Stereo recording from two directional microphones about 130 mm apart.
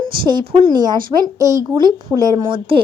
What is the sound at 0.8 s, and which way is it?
A woman's voice, 35° right (ahead or behind).